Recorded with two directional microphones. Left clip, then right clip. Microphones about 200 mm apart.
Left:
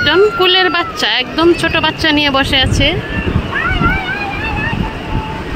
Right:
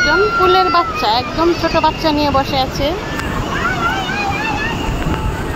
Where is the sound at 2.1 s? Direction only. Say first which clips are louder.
Left 2 dB; 35° left (ahead or behind).